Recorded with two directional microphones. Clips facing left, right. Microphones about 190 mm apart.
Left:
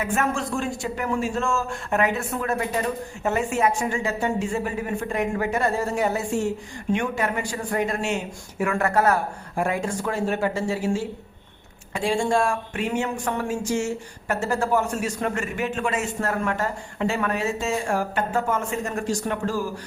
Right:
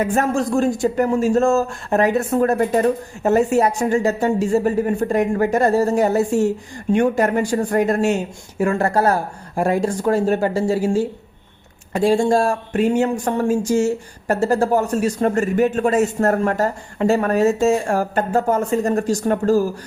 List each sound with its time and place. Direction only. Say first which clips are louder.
0.0 s speech: right 6 dB; 40° right (ahead or behind)